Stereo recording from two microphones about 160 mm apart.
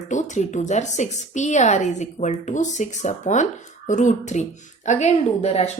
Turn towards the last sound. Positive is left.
turn(degrees=40)  # may be behind; listen again after turning